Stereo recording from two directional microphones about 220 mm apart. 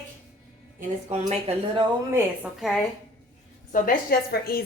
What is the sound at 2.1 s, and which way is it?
Speech, 5° right (ahead or behind).